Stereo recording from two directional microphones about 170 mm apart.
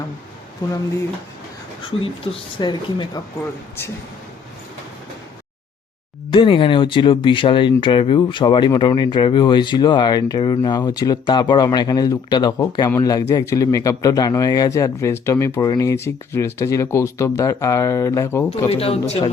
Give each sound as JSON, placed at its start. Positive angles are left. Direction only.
{"t": 0.6, "sound": "speech", "side_deg": 20}
{"t": 2.3, "sound": "speech", "side_deg": 35}
{"t": 2.6, "sound": "speech", "side_deg": 25}
{"t": 6.3, "sound": "speech", "side_deg": 30}
{"t": 18.7, "sound": "speech", "side_deg": 35}